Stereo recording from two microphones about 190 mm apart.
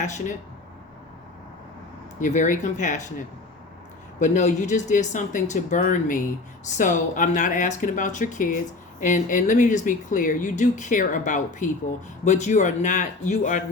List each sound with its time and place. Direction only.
0.0 s speech: 40° left (ahead or behind)
2.2 s speech: 40° left (ahead or behind)